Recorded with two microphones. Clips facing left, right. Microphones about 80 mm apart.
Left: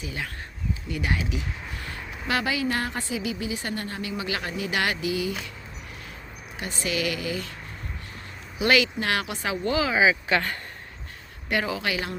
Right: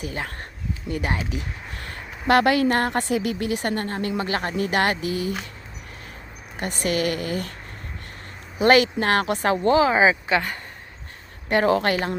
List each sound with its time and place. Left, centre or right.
0.0 s speech: right
2.2 s a woman's voice: right
6.6 s speech: right
8.5 s speech: right
9.7 s speech: right
10.2 s speech: centre
11.4 s speech: right